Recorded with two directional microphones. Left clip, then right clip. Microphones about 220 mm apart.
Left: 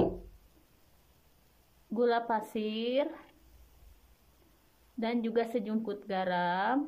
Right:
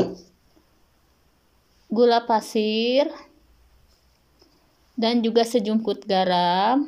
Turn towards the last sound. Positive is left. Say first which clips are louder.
# right 10 dB
turn(degrees=-20)  # may be behind; listen again after turning